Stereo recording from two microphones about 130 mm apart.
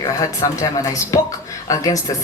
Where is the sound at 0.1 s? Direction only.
25° left (ahead or behind).